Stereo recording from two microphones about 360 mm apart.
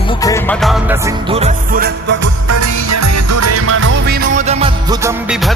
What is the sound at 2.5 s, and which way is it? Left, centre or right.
Music, right.